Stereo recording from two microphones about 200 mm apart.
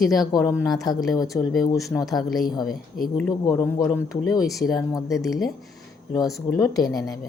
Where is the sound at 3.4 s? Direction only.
20° left (ahead or behind).